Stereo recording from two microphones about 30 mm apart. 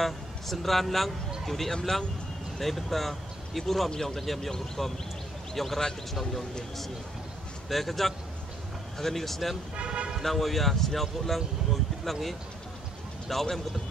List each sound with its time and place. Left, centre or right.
0.0 s a man's voice: centre
3.9 s speech: centre
4.2 s speech: centre
7.7 s speech: centre